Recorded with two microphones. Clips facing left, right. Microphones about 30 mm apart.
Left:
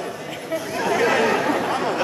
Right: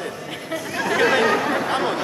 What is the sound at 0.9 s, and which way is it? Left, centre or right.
A man's voice, right.